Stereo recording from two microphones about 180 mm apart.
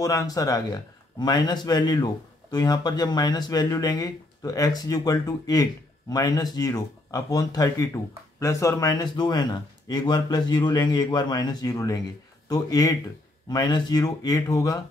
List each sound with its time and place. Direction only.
0.0 s speech: 20° left (ahead or behind)